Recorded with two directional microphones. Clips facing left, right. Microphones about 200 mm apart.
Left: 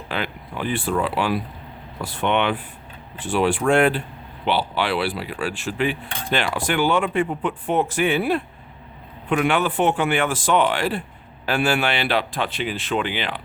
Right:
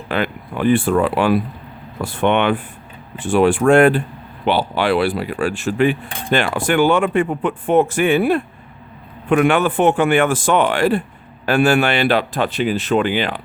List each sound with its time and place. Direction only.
0.1 s cutlery: 55° right (ahead or behind)